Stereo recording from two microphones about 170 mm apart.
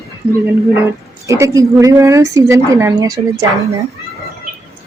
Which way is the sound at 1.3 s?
20° right (ahead or behind).